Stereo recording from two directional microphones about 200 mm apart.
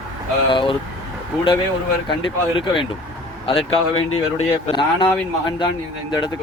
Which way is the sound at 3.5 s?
25° left (ahead or behind).